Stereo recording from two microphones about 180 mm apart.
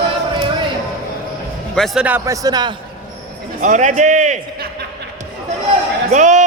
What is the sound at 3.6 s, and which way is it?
A man's voice, 45° right (ahead or behind).